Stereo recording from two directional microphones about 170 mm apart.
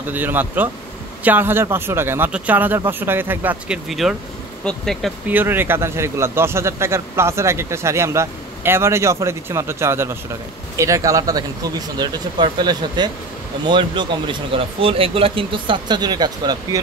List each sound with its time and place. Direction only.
0.1 s speech: 10° right (ahead or behind)
5.3 s speech: 10° right (ahead or behind)